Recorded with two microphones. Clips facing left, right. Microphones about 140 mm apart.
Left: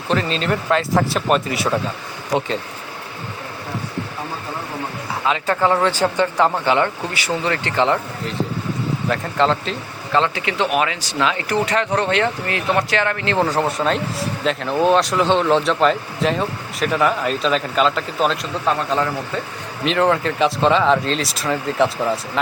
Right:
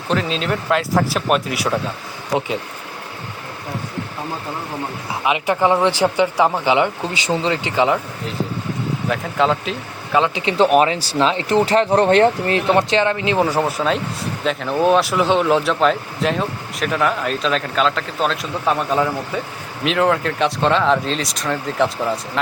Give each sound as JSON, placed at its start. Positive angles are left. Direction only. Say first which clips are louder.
{"t": 0.1, "sound": "speech", "louder": "even", "side_deg": 0}
{"t": 5.2, "sound": "speech", "louder": "right 1 dB", "side_deg": -15}
{"t": 9.0, "sound": "speech", "louder": "even", "side_deg": -5}
{"t": 10.4, "sound": "speech", "louder": "right 5 dB", "side_deg": -35}
{"t": 13.4, "sound": "speech", "louder": "left 1 dB", "side_deg": -5}
{"t": 18.6, "sound": "speech", "louder": "right 2 dB", "side_deg": -10}